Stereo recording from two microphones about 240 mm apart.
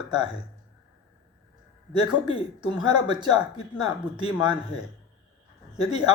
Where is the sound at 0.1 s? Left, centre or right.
Centre.